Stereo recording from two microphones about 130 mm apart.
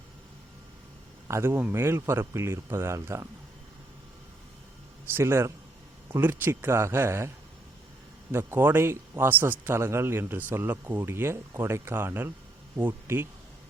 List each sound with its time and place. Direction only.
1.3 s a man's voice: 20° right (ahead or behind)
5.1 s a man's voice: 20° right (ahead or behind)
8.3 s a man's voice: 20° right (ahead or behind)